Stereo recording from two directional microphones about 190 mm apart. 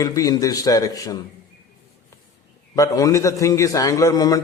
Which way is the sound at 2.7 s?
15° left (ahead or behind).